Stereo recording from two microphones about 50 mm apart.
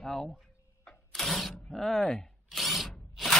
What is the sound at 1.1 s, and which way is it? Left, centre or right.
Vehicle, centre.